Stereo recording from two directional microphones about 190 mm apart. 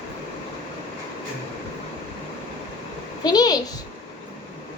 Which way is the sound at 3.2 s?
20° left (ahead or behind).